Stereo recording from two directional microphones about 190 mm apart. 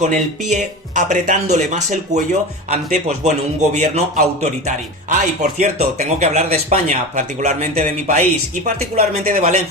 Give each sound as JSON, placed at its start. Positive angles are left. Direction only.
{"t": 0.0, "sound": "speech", "side_deg": -40}
{"t": 5.4, "sound": "speech", "side_deg": -40}